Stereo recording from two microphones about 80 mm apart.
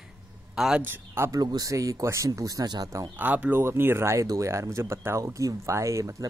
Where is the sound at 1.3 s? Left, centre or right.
Right.